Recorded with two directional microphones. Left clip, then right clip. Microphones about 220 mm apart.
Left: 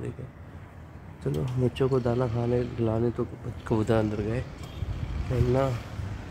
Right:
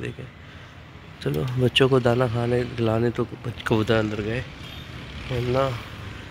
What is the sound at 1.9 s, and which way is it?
Speech, 20° right (ahead or behind).